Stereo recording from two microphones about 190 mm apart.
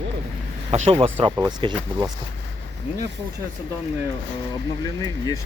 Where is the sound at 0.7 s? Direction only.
30° right (ahead or behind).